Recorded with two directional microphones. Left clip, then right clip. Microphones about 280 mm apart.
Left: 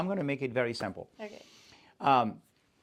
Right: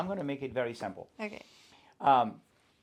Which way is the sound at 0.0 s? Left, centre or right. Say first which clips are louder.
Left 3 dB; left.